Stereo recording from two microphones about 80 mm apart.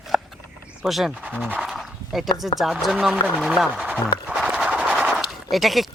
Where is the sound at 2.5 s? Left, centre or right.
Centre.